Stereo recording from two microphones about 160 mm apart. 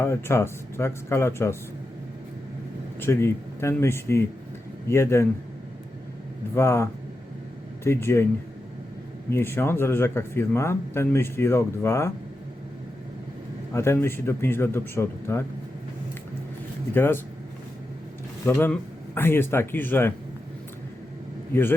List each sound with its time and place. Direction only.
0.0 s speech: 15° left (ahead or behind)
3.0 s speech: 15° left (ahead or behind)
6.5 s speech: 15° left (ahead or behind)
7.9 s speech: 15° left (ahead or behind)
9.3 s speech: 15° left (ahead or behind)
13.7 s speech: 15° left (ahead or behind)
16.9 s speech: 15° left (ahead or behind)
18.4 s speech: 10° left (ahead or behind)
21.5 s speech: 15° left (ahead or behind)